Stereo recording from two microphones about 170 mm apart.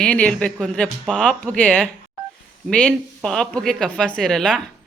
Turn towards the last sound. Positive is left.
turn(degrees=5)  # may be behind; listen again after turning